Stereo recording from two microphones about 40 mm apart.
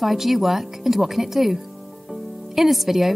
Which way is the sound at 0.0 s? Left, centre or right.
Centre.